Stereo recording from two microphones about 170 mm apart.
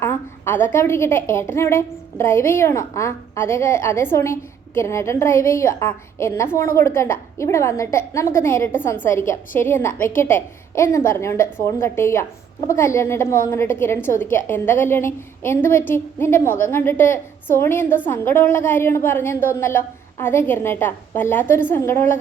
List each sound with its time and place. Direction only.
0.0 s a woman's voice: 10° left (ahead or behind)